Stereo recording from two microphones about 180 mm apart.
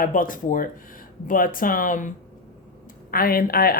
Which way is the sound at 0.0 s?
50° left (ahead or behind).